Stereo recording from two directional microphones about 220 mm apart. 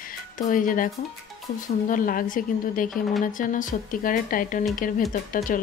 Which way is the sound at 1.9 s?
40° left (ahead or behind).